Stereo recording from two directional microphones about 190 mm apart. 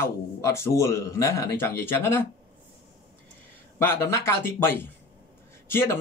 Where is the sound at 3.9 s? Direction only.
15° left (ahead or behind).